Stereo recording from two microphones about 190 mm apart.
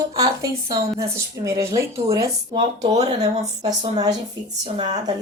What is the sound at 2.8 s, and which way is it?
Speech, 35° right (ahead or behind).